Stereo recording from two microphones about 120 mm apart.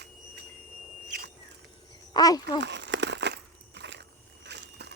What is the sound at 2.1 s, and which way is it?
Speech, 30° left (ahead or behind).